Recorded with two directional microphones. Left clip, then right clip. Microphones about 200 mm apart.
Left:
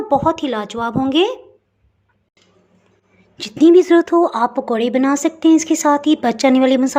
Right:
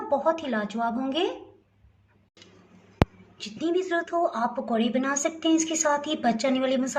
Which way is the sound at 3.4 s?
50° left (ahead or behind).